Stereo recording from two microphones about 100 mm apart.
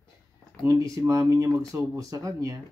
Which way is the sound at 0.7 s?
35° right (ahead or behind).